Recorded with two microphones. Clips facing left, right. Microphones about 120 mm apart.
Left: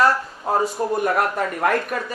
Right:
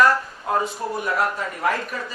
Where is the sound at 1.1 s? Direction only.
55° left (ahead or behind).